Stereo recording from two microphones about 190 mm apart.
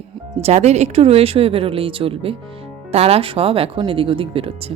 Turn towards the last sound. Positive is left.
turn(degrees=-30)  # may be behind; listen again after turning